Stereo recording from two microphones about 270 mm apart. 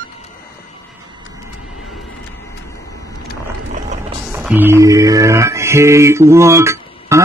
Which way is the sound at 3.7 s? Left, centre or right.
Right.